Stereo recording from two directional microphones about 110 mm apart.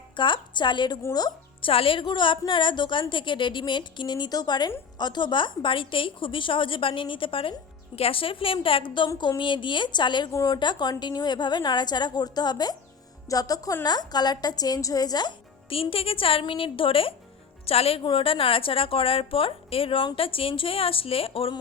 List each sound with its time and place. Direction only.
0.2 s a woman's voice: 45° left (ahead or behind)
15.7 s a woman's voice: 55° left (ahead or behind)